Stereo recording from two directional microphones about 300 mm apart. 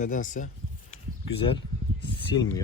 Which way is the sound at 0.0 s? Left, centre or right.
Left.